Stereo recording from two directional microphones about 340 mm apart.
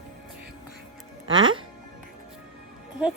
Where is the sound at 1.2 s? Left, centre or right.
Right.